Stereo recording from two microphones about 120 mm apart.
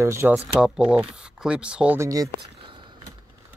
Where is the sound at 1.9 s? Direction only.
25° right (ahead or behind).